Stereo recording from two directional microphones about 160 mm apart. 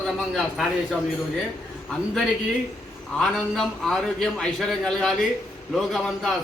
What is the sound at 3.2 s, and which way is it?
A man's voice, 5° left (ahead or behind).